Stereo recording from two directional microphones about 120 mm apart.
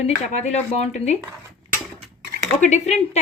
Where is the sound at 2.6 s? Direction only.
70° left (ahead or behind).